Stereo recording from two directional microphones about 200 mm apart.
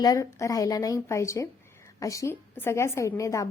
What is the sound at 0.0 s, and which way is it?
A woman's voice, 20° left (ahead or behind).